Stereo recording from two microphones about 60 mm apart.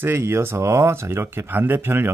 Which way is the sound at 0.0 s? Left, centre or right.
Right.